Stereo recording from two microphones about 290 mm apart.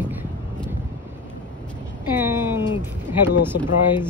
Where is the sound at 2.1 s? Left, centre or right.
Centre.